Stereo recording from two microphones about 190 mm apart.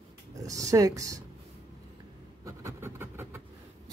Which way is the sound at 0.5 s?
15° right (ahead or behind).